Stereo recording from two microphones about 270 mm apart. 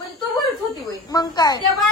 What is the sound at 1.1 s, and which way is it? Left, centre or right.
Speech, centre.